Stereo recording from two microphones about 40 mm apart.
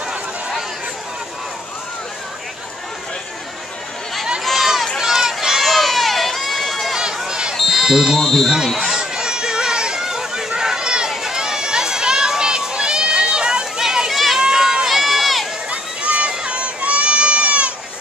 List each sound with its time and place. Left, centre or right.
4.6 s run: centre
5.5 s run: centre
7.2 s basketball bounce: right
7.6 s smoke detector: centre
8.2 s speech: centre
8.6 s a sound: centre
11.1 s run: centre
13.7 s a sound: centre
14.1 s run: centre
14.5 s run: centre
15.7 s a sound: right